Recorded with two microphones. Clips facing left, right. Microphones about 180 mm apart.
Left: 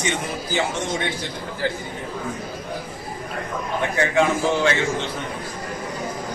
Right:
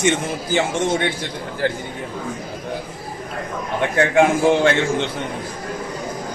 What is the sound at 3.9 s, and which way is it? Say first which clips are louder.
Speech: right 5 dB; 55° right (ahead or behind).